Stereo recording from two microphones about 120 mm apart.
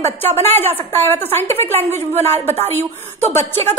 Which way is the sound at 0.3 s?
15° left (ahead or behind).